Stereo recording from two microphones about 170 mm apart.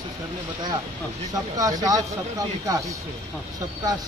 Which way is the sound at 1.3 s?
20° right (ahead or behind).